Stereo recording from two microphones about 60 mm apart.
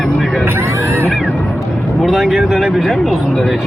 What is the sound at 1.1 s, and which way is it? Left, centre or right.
Music, centre.